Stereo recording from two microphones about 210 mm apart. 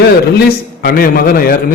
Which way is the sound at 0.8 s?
45° left (ahead or behind).